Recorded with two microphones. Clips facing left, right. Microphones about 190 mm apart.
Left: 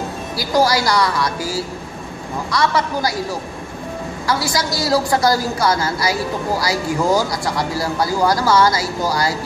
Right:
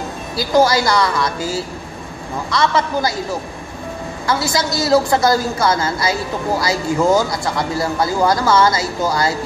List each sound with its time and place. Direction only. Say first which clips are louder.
0.4 s speech: right 3 dB; 25° right (ahead or behind)
2.6 s speech: right 2 dB; 25° right (ahead or behind)
4.3 s speech: right 2 dB; 25° right (ahead or behind)